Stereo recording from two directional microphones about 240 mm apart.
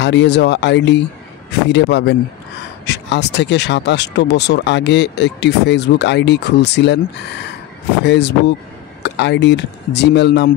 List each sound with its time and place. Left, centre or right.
0.0 s speech: left
8.0 s speech: left